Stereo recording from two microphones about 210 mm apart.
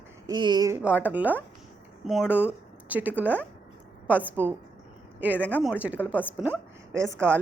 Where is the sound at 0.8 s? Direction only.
5° right (ahead or behind).